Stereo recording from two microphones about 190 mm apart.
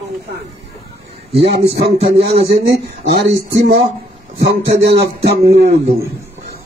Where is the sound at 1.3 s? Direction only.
30° right (ahead or behind).